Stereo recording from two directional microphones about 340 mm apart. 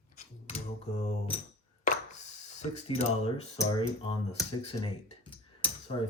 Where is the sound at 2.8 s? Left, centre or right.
Centre.